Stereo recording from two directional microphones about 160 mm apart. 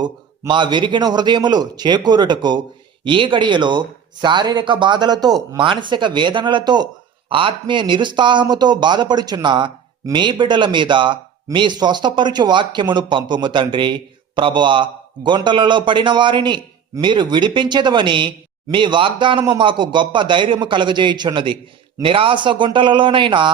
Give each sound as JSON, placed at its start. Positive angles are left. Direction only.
{"t": 0.0, "sound": "a man's voice", "side_deg": -30}